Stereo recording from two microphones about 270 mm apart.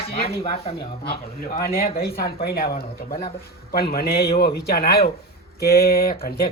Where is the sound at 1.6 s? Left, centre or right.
Left.